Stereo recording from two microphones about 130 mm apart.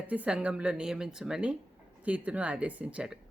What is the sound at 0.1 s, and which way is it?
A woman's voice, 10° right (ahead or behind).